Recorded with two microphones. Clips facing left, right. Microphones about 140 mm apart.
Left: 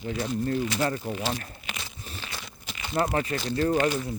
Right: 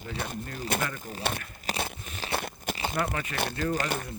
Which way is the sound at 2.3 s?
55° right (ahead or behind).